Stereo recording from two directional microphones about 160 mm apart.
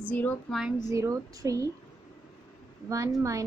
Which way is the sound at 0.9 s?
20° right (ahead or behind).